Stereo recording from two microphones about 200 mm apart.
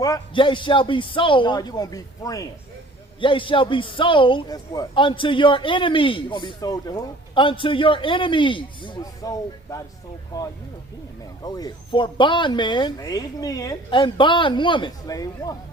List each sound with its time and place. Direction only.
0.0 s a man's voice: 20° left (ahead or behind)